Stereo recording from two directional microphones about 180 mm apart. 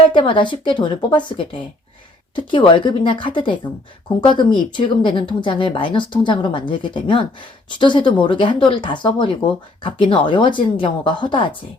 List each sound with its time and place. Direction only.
0.1 s speech: 25° left (ahead or behind)